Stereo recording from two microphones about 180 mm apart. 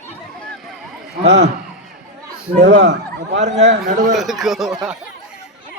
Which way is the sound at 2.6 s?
75° right (ahead or behind).